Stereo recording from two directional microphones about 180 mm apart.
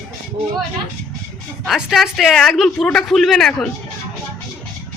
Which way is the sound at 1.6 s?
Centre (ahead or behind).